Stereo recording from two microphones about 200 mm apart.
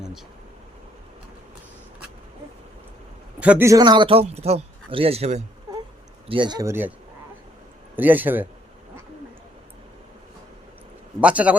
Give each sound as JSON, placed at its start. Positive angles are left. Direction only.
{"t": 3.4, "sound": "a man's voice", "side_deg": -10}
{"t": 7.9, "sound": "a man's voice", "side_deg": -10}
{"t": 11.2, "sound": "a man's voice", "side_deg": -5}